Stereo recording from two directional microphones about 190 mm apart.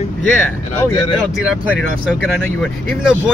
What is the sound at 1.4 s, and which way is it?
Speech, 5° right (ahead or behind).